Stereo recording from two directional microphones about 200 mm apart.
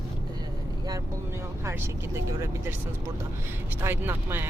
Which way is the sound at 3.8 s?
10° right (ahead or behind).